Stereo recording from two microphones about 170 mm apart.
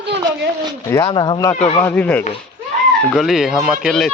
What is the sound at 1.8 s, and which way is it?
Speech, 10° left (ahead or behind).